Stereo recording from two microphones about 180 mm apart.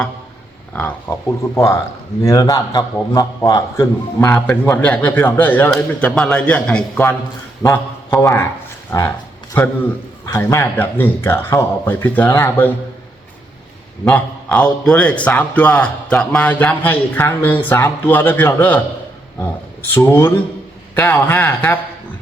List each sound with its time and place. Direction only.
0.7 s a man's voice: 10° left (ahead or behind)
8.9 s music: 15° left (ahead or behind)
10.2 s a man's voice: 20° left (ahead or behind)
14.0 s a man's voice: 5° left (ahead or behind)